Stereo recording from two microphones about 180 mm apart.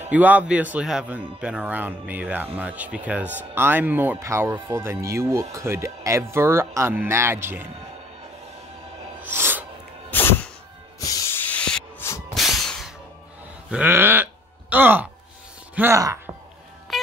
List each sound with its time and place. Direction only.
0.1 s speech: 10° right (ahead or behind)
9.2 s sneeze: 10° right (ahead or behind)
10.1 s music: 10° left (ahead or behind)
11.0 s hiss: 20° left (ahead or behind)
12.4 s a sound: centre (ahead or behind)
13.7 s speech: 10° right (ahead or behind)
16.9 s music: centre (ahead or behind)